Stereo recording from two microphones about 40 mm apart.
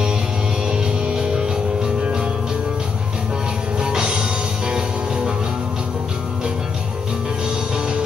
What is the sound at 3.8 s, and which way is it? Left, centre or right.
Music, centre.